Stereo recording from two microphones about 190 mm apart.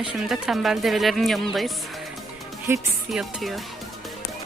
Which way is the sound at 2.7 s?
15° right (ahead or behind).